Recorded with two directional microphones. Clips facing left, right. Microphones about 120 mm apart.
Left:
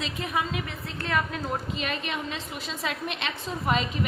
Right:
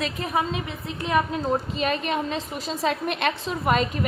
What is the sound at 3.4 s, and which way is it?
Speech, 65° right (ahead or behind).